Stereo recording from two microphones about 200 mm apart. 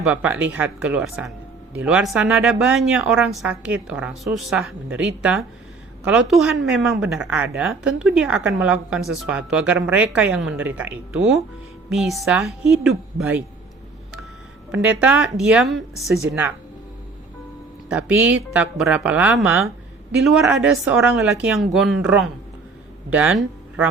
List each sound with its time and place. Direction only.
0.0 s a woman's voice: 5° right (ahead or behind)
14.8 s a woman's voice: 5° right (ahead or behind)
17.8 s a woman's voice: 5° right (ahead or behind)